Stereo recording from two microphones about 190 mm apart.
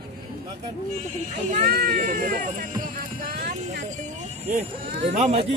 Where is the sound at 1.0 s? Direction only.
40° right (ahead or behind).